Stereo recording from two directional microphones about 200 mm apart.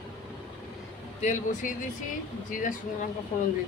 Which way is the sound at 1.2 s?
35° left (ahead or behind).